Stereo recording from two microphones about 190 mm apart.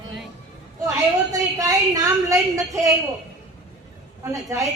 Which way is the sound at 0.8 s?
20° right (ahead or behind).